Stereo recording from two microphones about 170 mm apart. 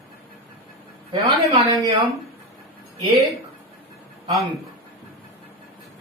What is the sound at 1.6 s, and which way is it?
Speech, 20° right (ahead or behind).